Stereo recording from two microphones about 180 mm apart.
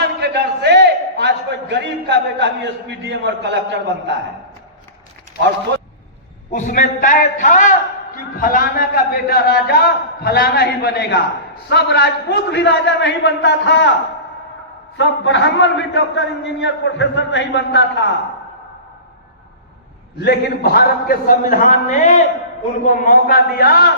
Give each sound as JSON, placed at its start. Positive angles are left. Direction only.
{"t": 0.0, "sound": "a sound", "side_deg": -70}
{"t": 2.9, "sound": "a man's voice", "side_deg": -70}
{"t": 6.5, "sound": "a man's voice", "side_deg": 45}
{"t": 14.9, "sound": "a man's voice", "side_deg": 90}
{"t": 20.1, "sound": "a man's voice", "side_deg": 65}